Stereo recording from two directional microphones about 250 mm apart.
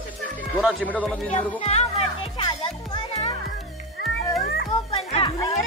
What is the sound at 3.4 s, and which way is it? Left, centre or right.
Music, centre.